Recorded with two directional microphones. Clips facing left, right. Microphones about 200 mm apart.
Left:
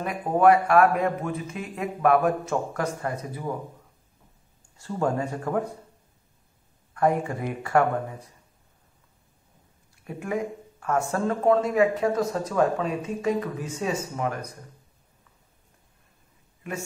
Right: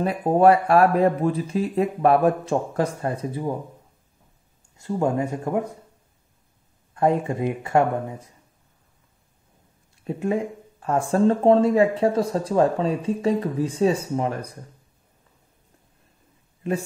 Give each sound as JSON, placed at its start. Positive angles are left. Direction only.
{"t": 0.0, "sound": "speech", "side_deg": -30}
{"t": 4.7, "sound": "speech", "side_deg": -15}
{"t": 6.9, "sound": "speech", "side_deg": -25}
{"t": 10.0, "sound": "speech", "side_deg": -25}